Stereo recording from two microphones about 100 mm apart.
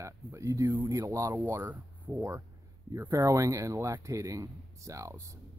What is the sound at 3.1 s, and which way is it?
A man's voice, 35° right (ahead or behind).